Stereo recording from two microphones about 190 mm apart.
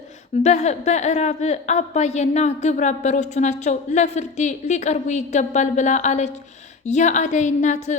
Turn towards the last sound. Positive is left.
turn(degrees=40)  # may be behind; listen again after turning